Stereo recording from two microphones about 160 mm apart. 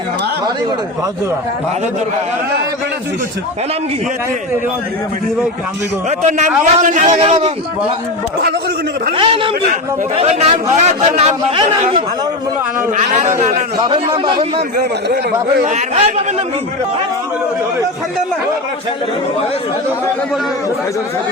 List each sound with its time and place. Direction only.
6.1 s a man's voice: 50° right (ahead or behind)
7.2 s a man's voice: 35° right (ahead or behind)
9.1 s a man's voice: 35° right (ahead or behind)
13.0 s a man's voice: 50° right (ahead or behind)
13.8 s speech: 30° right (ahead or behind)
14.8 s a man's voice: 75° right (ahead or behind)
15.6 s a man's voice: 45° right (ahead or behind)